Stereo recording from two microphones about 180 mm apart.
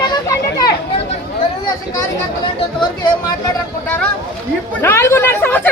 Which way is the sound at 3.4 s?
20° left (ahead or behind).